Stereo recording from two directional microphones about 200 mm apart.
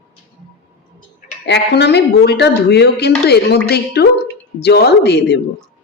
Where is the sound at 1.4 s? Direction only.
60° left (ahead or behind).